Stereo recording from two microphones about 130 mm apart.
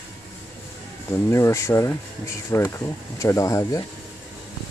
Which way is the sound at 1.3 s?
20° left (ahead or behind).